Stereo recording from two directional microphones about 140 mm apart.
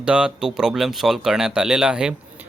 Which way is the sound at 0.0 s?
5° right (ahead or behind).